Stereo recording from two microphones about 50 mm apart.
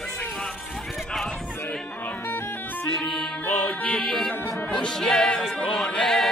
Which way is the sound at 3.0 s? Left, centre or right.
Centre.